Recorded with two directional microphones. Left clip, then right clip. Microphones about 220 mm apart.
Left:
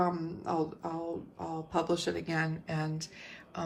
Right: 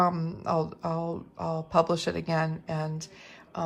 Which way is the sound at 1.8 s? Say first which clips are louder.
Right 6 dB; 25° right (ahead or behind).